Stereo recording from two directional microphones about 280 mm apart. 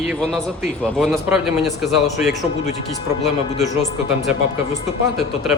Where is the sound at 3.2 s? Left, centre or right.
Left.